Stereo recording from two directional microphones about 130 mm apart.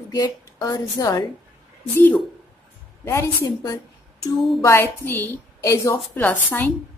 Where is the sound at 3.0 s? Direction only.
20° left (ahead or behind).